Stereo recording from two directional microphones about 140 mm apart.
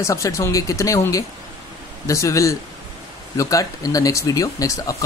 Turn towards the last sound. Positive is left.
turn(degrees=25)  # may be behind; listen again after turning